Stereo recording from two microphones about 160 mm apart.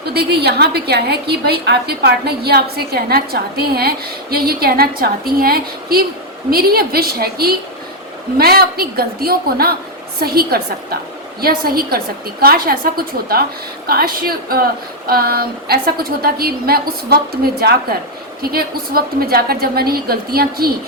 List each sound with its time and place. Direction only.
0.0 s a woman's voice: 90° right; by 20.7 s 70° right (ahead or behind)